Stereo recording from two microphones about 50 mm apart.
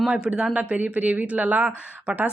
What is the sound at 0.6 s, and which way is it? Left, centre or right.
Speech, right.